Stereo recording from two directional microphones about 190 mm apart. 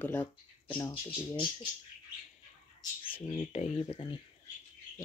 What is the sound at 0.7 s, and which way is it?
Speech, 25° left (ahead or behind).